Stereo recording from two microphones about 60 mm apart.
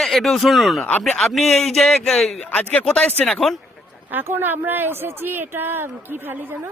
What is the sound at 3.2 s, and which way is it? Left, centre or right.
Speech, centre.